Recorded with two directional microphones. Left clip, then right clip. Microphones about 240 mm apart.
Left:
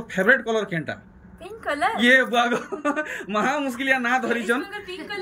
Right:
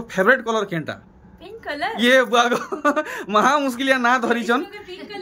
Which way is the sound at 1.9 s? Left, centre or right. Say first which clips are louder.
Right 3 dB; centre.